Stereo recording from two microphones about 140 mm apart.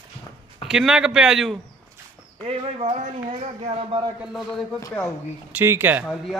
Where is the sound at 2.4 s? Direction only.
45° right (ahead or behind).